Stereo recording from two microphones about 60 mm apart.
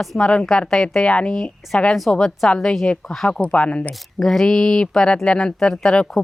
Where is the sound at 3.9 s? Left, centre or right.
Centre.